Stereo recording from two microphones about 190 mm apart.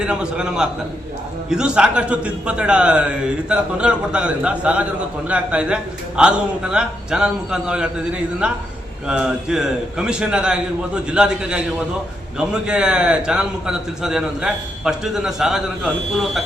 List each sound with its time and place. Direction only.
0.0 s a man's voice: 5° right (ahead or behind)